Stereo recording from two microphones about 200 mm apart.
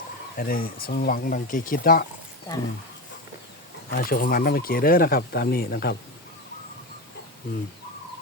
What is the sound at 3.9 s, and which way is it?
Speech, 45° left (ahead or behind).